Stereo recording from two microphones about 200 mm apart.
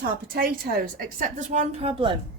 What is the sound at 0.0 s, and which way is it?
Speech, 50° right (ahead or behind).